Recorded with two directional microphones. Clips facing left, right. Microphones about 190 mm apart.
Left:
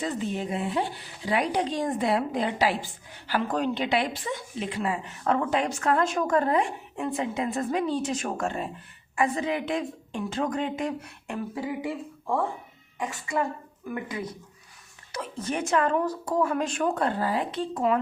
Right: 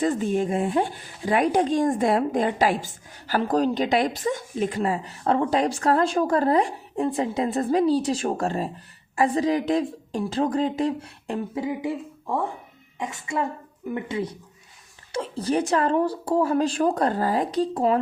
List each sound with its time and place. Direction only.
0.0 s speech: 45° right (ahead or behind); by 11.9 s 20° right (ahead or behind)
13.0 s speech: 20° right (ahead or behind)